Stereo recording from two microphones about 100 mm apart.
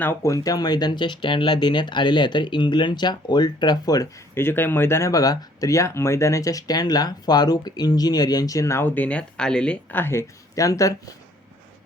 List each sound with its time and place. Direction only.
0.0 s speech: 25° left (ahead or behind)
4.4 s speech: 20° left (ahead or behind)
9.0 s speech: 10° left (ahead or behind); by 10.9 s 35° left (ahead or behind)